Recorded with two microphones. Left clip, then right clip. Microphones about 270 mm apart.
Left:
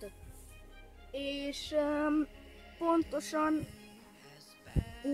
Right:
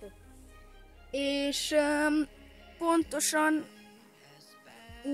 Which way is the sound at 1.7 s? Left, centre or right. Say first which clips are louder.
Right 4 dB; centre.